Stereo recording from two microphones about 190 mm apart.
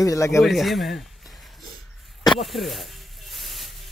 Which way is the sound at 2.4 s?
Centre (ahead or behind).